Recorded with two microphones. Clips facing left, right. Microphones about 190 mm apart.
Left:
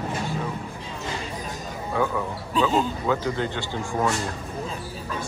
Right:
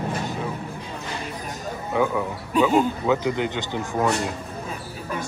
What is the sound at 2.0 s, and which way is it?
A man's voice, 15° right (ahead or behind).